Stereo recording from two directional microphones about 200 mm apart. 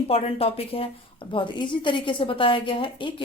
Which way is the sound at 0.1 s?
30° left (ahead or behind).